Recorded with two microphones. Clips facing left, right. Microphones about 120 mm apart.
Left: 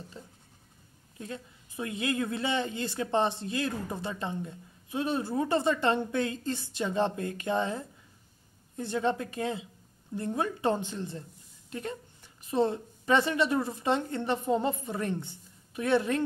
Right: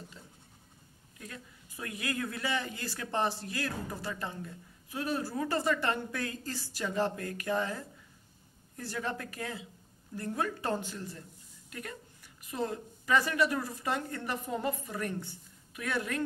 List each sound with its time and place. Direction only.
0.2 s writing: 30° left (ahead or behind)
1.1 s speech: 25° left (ahead or behind)